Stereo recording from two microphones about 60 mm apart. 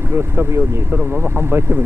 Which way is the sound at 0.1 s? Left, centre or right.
Right.